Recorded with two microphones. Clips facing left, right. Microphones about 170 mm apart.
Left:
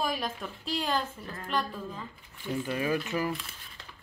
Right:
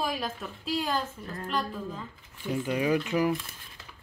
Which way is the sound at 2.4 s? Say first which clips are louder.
Right 3 dB; 15° right (ahead or behind).